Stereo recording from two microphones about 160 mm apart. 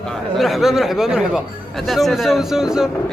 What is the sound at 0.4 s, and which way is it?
A man's voice, centre (ahead or behind).